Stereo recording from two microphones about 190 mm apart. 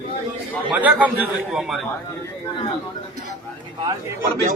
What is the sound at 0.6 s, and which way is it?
A man's voice, 10° right (ahead or behind).